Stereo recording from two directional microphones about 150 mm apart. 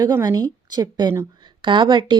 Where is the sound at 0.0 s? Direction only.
25° right (ahead or behind).